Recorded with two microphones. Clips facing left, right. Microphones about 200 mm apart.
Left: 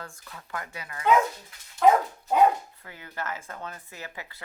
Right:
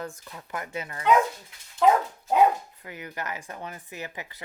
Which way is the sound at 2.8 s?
15° right (ahead or behind).